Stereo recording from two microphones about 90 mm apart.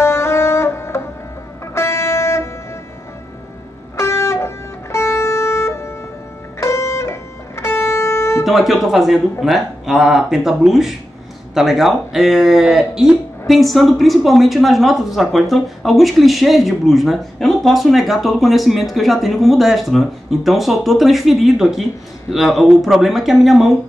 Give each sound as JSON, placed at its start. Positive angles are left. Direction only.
{"t": 0.0, "sound": "music", "side_deg": 30}
{"t": 3.9, "sound": "music", "side_deg": 30}
{"t": 8.5, "sound": "a woman's voice", "side_deg": -5}